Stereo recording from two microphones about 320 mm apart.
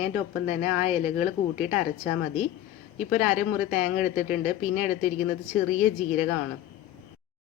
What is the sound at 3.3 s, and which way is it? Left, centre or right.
Speech, left.